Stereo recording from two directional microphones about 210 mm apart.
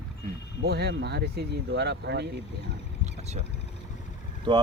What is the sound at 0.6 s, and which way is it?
Speech, 50° right (ahead or behind).